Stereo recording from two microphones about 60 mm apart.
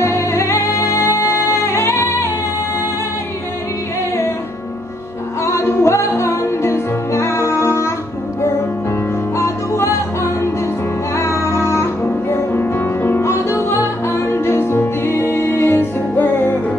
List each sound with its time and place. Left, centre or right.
0.0 s music: left
1.5 s singing: left
5.4 s music: left
9.4 s music: left
11.1 s music: left
13.2 s music: left